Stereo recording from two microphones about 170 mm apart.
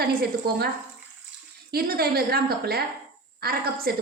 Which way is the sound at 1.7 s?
65° right (ahead or behind).